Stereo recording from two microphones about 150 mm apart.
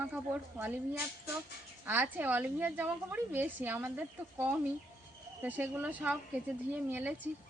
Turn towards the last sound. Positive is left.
turn(degrees=-10)  # may be behind; listen again after turning